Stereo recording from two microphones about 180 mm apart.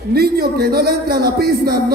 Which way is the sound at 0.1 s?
60° right (ahead or behind).